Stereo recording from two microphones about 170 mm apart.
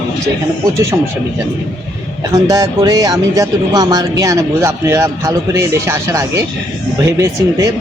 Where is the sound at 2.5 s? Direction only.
20° right (ahead or behind).